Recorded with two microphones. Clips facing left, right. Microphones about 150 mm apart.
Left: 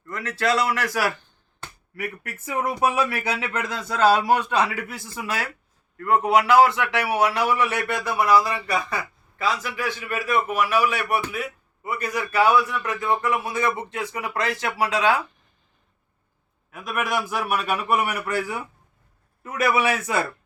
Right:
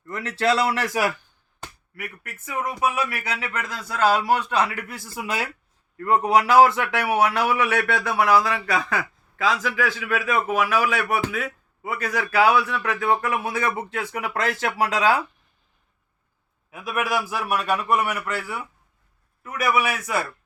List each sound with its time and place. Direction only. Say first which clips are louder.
0.2 s a man's voice: right 1 dB; 30° right (ahead or behind)
2.2 s speech: left 2 dB; 35° left (ahead or behind)
3.9 s a man's voice: left 2 dB; 15° left (ahead or behind)
4.9 s a man's voice: right 1 dB; 5° right (ahead or behind)
5.2 s speech: right 1 dB; 15° right (ahead or behind)
6.0 s a man's voice: even; 40° right (ahead or behind); by 13.6 s 60° right (ahead or behind)
14.1 s speech: right 1 dB; 50° right (ahead or behind)
16.7 s a man's voice: right 1 dB; 5° right (ahead or behind); by 18.6 s 15° left (ahead or behind)
19.4 s a man's voice: left 1 dB; 30° left (ahead or behind)